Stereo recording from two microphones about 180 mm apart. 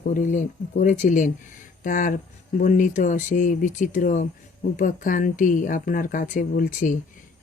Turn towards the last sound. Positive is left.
turn(degrees=50)  # may be behind; listen again after turning